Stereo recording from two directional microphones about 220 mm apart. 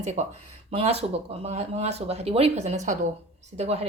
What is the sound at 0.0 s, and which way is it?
Speech, 30° right (ahead or behind).